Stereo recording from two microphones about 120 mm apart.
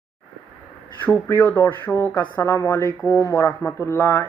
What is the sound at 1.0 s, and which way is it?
Speech, 15° left (ahead or behind).